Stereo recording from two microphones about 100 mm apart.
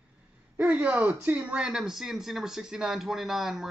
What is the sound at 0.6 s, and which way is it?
Speech, 10° right (ahead or behind).